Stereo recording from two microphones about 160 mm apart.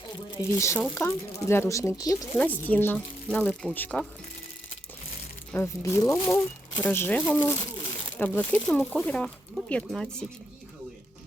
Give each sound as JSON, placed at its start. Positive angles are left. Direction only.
{"t": 0.3, "sound": "speech", "side_deg": 20}
{"t": 5.5, "sound": "speech", "side_deg": 15}